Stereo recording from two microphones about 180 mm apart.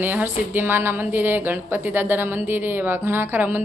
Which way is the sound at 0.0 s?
10° right (ahead or behind).